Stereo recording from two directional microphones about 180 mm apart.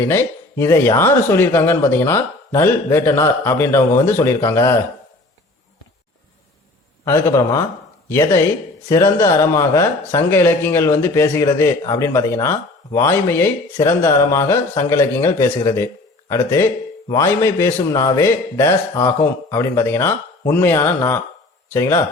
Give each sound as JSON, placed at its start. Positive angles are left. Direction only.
{"t": 0.0, "sound": "speech", "side_deg": 15}
{"t": 7.0, "sound": "speech", "side_deg": 15}